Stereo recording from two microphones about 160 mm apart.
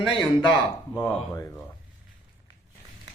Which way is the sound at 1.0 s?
15° left (ahead or behind).